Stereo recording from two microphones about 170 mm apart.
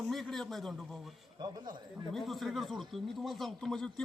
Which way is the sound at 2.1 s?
Centre (ahead or behind).